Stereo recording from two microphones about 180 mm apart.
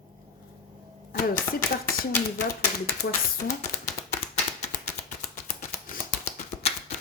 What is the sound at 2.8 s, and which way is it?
Speech, 55° left (ahead or behind).